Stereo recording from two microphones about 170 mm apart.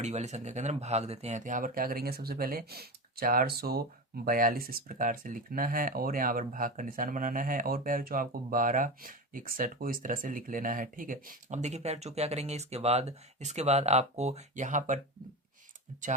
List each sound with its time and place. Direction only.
0.0 s speech: 40° right (ahead or behind)